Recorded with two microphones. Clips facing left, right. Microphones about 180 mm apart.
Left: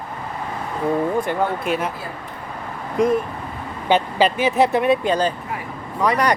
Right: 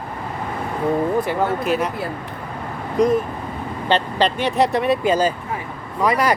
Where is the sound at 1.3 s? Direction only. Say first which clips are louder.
Right 1 dB; centre (ahead or behind).